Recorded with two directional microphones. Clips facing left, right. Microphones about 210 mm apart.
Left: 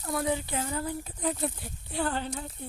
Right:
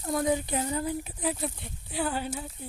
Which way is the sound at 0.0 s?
20° right (ahead or behind).